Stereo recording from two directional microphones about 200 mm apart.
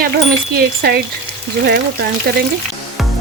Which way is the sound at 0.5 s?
50° right (ahead or behind).